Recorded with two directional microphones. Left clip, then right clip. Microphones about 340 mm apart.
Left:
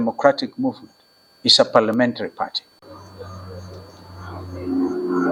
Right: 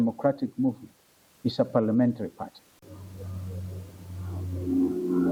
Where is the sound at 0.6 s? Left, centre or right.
Centre.